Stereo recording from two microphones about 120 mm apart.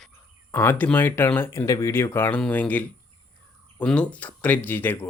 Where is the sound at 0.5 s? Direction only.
15° left (ahead or behind).